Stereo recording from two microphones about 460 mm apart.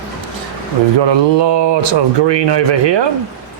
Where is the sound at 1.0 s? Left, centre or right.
Right.